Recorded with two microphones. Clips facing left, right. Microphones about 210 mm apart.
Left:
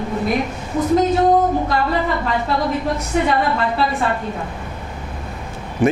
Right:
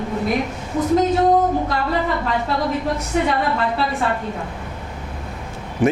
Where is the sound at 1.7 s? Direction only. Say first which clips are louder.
Left 2 dB; 20° left (ahead or behind).